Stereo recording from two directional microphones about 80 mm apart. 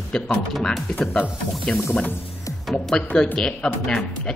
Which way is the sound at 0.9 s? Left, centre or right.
Centre.